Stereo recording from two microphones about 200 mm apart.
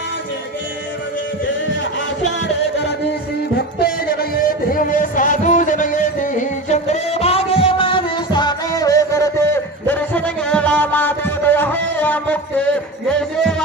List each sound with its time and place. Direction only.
3.5 s music: 50° left (ahead or behind); by 13.6 s 5° left (ahead or behind)